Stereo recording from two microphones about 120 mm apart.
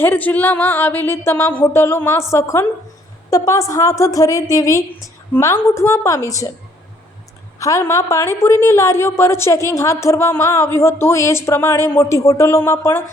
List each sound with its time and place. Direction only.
0.0 s a woman's voice: 15° left (ahead or behind)
7.6 s a woman's voice: 25° left (ahead or behind)